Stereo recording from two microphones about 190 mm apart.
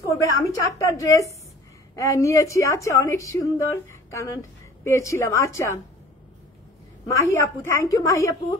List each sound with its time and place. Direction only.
0.2 s a woman's voice: 15° left (ahead or behind)
7.1 s a woman's voice: 15° left (ahead or behind)